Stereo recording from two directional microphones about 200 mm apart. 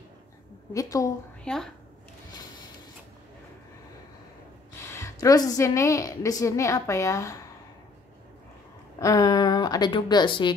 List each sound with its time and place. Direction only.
0.7 s a woman's voice: 15° left (ahead or behind)
1.4 s speech: 5° left (ahead or behind)
4.8 s a woman's voice: 15° left (ahead or behind)
9.0 s a woman's voice: 15° left (ahead or behind)